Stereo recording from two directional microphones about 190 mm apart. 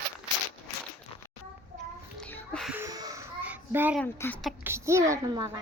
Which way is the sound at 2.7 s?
15° right (ahead or behind).